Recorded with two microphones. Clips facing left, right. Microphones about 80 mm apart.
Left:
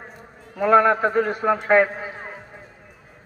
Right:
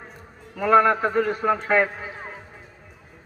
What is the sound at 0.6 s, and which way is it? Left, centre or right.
A man's voice, left.